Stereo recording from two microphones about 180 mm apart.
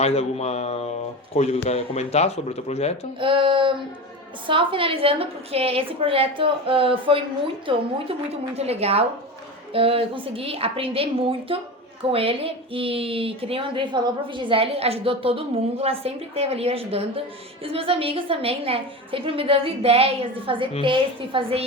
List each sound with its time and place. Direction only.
0.0 s speech: 35° left (ahead or behind)
3.2 s a woman's voice: 30° right (ahead or behind)